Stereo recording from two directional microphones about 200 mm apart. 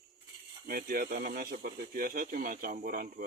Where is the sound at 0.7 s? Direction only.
45° right (ahead or behind).